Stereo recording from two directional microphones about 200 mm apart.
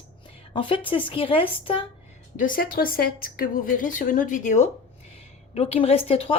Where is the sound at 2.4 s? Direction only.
45° left (ahead or behind); by 6.4 s 30° left (ahead or behind).